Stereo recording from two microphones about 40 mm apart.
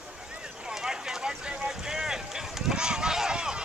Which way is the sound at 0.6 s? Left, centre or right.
Centre.